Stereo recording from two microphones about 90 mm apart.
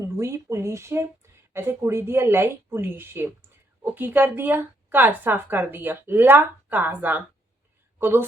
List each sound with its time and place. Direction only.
0.0 s a woman's voice: 30° right (ahead or behind)